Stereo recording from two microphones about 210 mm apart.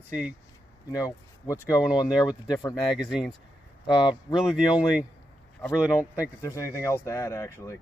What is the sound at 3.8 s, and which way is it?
Speech, 20° left (ahead or behind).